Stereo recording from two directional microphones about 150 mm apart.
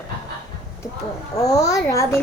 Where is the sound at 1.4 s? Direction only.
20° left (ahead or behind).